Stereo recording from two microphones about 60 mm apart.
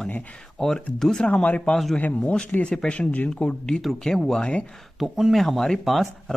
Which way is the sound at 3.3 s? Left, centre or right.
Centre.